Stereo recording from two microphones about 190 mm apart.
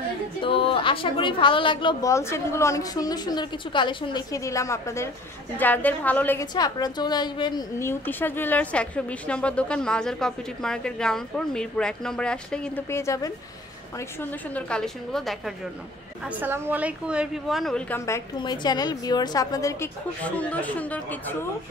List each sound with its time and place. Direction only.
0.4 s a woman's voice: 30° left (ahead or behind); by 6.4 s 10° left (ahead or behind)
6.4 s a woman's voice: 20° left (ahead or behind); by 15.5 s centre (ahead or behind)
16.3 s a woman's voice: 10° right (ahead or behind); by 21.5 s 10° left (ahead or behind)